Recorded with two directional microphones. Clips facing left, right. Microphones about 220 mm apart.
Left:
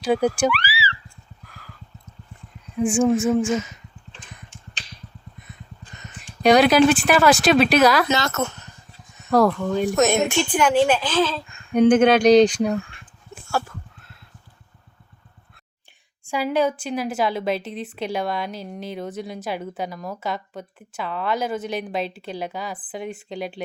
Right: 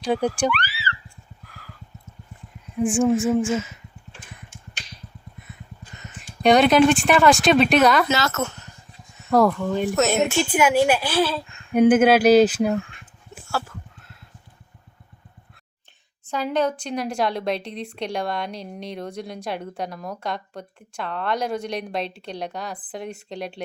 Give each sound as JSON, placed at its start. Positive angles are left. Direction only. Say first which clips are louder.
{"t": 0.0, "sound": "a sound", "louder": "left 2 dB", "side_deg": 10}
{"t": 2.8, "sound": "speech", "louder": "left 1 dB", "side_deg": 0}
{"t": 3.1, "sound": "speech", "louder": "left 1 dB", "side_deg": -15}
{"t": 6.2, "sound": "speech", "louder": "left 1 dB", "side_deg": 0}
{"t": 9.3, "sound": "speech", "louder": "even", "side_deg": 0}
{"t": 16.2, "sound": "speech", "louder": "left 2 dB", "side_deg": 10}